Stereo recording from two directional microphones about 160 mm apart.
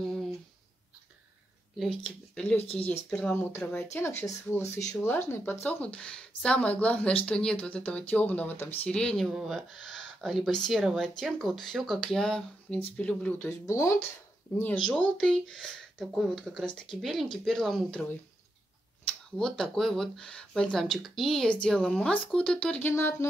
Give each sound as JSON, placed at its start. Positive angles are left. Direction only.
{"t": 2.0, "sound": "speech", "side_deg": 5}
{"t": 2.6, "sound": "speech", "side_deg": 40}
{"t": 3.1, "sound": "speech", "side_deg": 5}
{"t": 3.3, "sound": "speech", "side_deg": 15}
{"t": 19.0, "sound": "speech", "side_deg": 5}